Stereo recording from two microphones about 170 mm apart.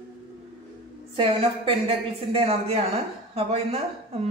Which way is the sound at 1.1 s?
30° right (ahead or behind).